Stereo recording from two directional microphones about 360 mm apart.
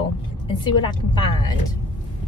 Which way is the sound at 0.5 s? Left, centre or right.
Centre.